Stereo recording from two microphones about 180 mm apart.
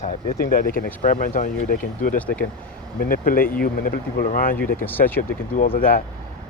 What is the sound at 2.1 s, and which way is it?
Speech, 10° left (ahead or behind).